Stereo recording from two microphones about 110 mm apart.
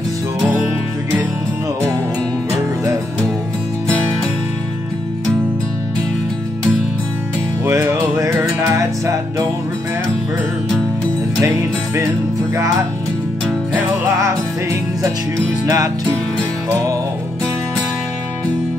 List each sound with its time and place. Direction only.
7.6 s music: 25° right (ahead or behind)
11.4 s music: 25° right (ahead or behind)
14.2 s music: 30° right (ahead or behind)